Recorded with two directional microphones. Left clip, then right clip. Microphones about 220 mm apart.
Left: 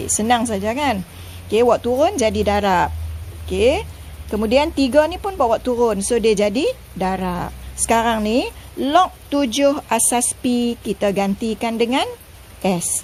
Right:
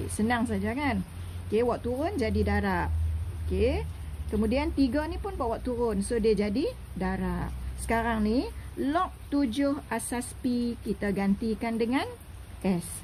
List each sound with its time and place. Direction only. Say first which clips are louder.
0.2 s speech: left 10 dB; 25° left (ahead or behind)